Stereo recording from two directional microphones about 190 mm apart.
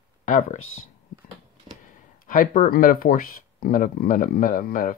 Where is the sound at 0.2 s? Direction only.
45° left (ahead or behind).